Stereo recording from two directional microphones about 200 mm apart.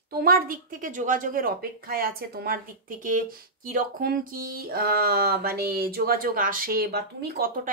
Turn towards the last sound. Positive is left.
turn(degrees=-50)  # may be behind; listen again after turning